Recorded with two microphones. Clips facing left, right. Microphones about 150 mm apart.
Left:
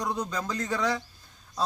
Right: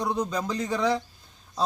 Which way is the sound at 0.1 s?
15° right (ahead or behind).